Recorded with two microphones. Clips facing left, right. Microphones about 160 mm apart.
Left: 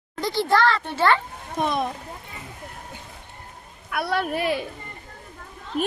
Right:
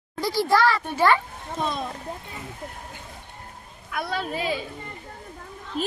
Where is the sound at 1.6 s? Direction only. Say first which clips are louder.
Left 4 dB; 65° left (ahead or behind).